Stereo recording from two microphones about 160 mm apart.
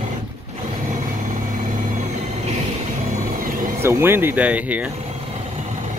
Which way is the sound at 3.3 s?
60° right (ahead or behind).